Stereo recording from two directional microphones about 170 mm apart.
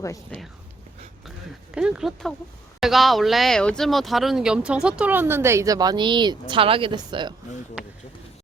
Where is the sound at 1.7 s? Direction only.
5° right (ahead or behind); by 7.3 s 25° right (ahead or behind).